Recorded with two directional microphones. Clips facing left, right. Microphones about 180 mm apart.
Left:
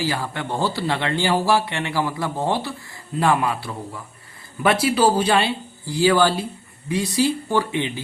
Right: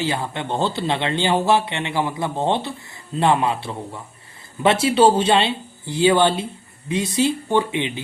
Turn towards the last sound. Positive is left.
turn(degrees=-20)  # may be behind; listen again after turning